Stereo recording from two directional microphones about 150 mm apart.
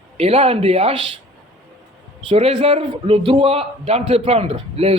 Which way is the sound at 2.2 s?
40° right (ahead or behind).